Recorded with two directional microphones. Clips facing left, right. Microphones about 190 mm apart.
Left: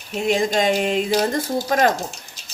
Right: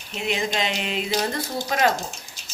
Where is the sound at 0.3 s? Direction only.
45° left (ahead or behind).